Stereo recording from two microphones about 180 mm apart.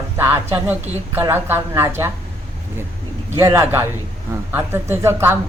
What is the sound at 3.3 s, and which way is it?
Speech, 15° right (ahead or behind).